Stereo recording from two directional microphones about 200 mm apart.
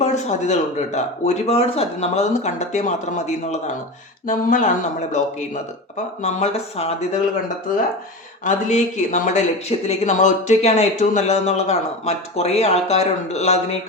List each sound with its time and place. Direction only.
0.0 s speech: 35° left (ahead or behind)
6.2 s speech: 30° left (ahead or behind)
8.4 s speech: 40° left (ahead or behind)